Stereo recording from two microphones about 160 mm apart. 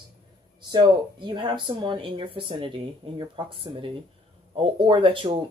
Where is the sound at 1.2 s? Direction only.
30° right (ahead or behind).